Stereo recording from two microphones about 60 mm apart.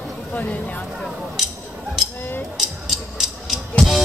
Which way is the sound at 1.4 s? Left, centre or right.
Centre.